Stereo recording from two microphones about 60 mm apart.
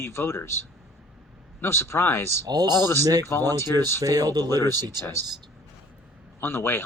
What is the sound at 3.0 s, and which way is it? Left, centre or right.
Speech, right.